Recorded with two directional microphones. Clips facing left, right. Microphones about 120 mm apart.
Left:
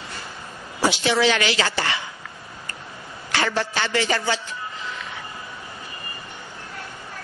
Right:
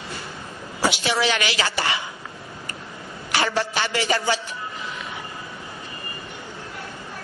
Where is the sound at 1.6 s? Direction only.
20° right (ahead or behind).